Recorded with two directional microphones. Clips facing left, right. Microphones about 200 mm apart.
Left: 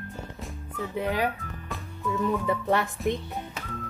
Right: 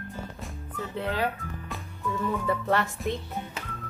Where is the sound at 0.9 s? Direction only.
15° left (ahead or behind).